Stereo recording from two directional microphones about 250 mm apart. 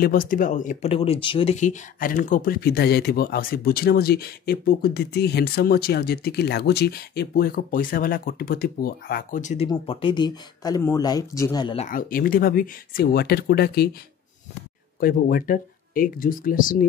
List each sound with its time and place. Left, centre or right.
0.0 s speech: left
15.0 s speech: left